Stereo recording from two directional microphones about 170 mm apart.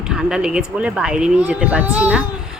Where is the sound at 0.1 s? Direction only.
5° right (ahead or behind).